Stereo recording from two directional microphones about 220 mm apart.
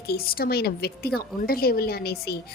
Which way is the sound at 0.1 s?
45° left (ahead or behind).